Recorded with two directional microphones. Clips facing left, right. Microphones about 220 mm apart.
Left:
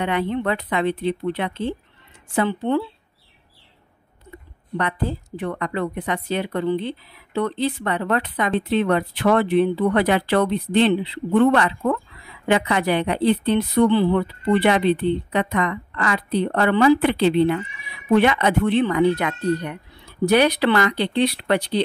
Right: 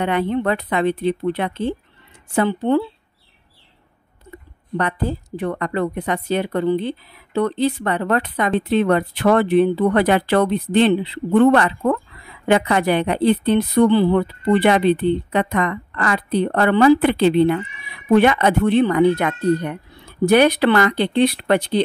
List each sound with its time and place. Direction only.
0.0 s speech: 50° right (ahead or behind)
5.4 s speech: 40° right (ahead or behind)